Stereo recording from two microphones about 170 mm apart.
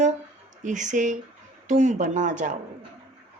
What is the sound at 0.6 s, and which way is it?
A woman's voice, 45° right (ahead or behind).